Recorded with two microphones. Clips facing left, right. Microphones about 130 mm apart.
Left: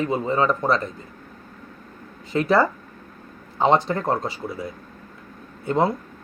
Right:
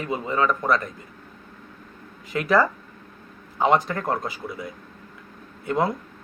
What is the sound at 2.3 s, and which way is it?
Speech, 30° left (ahead or behind).